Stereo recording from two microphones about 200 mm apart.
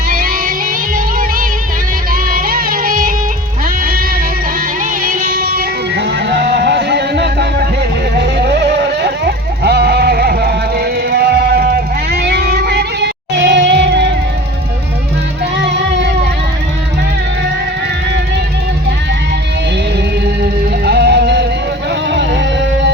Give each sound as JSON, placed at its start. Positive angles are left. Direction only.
{"t": 0.1, "sound": "music", "side_deg": -45}
{"t": 2.3, "sound": "music", "side_deg": -45}
{"t": 5.0, "sound": "music", "side_deg": -45}
{"t": 8.1, "sound": "a sound", "side_deg": -55}
{"t": 15.5, "sound": "music", "side_deg": -60}
{"t": 20.4, "sound": "music", "side_deg": -55}